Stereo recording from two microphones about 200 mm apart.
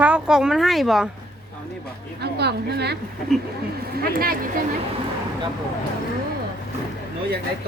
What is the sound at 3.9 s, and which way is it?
Speech, 45° right (ahead or behind).